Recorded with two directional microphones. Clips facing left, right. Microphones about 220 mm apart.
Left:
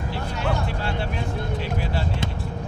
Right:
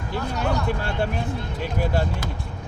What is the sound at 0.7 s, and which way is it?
Speech, 50° right (ahead or behind).